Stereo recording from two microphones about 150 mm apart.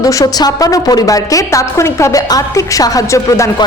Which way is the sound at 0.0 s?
20° left (ahead or behind).